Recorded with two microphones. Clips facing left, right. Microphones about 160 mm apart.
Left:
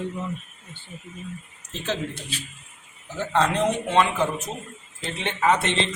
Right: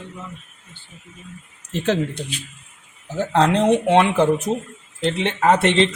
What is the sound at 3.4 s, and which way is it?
Speech, 65° right (ahead or behind).